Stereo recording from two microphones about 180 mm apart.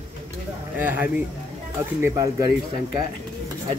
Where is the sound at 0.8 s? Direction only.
10° right (ahead or behind).